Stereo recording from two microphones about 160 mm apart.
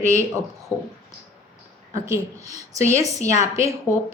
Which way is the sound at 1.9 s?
20° right (ahead or behind).